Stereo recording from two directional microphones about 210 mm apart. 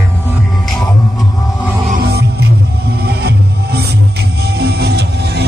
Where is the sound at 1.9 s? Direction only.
50° right (ahead or behind).